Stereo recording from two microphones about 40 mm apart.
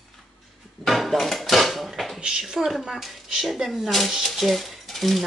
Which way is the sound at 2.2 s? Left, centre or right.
Centre.